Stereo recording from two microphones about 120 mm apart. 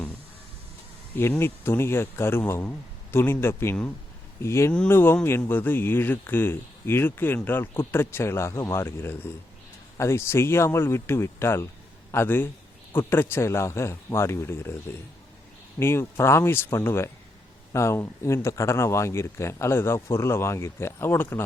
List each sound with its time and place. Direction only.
1.1 s speech: 20° left (ahead or behind)
15.8 s speech: 20° left (ahead or behind)